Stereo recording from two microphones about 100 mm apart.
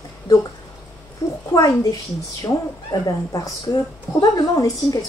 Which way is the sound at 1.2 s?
40° left (ahead or behind).